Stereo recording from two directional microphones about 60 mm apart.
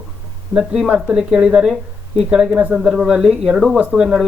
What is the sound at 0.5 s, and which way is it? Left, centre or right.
Speech, centre.